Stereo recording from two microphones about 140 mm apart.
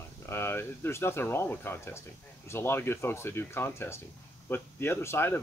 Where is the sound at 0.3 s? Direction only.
15° left (ahead or behind).